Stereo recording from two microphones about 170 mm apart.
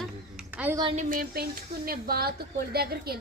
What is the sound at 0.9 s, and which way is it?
A woman's voice, 55° right (ahead or behind).